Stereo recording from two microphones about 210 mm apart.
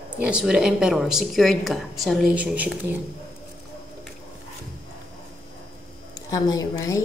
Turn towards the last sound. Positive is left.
turn(degrees=15)  # may be behind; listen again after turning